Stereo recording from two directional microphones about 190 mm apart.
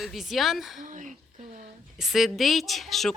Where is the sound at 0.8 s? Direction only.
40° right (ahead or behind).